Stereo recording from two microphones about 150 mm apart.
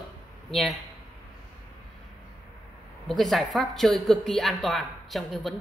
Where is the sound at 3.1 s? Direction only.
Centre (ahead or behind).